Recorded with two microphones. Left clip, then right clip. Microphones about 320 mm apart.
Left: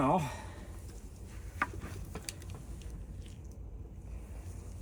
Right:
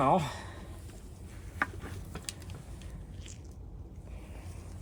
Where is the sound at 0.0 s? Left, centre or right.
Centre.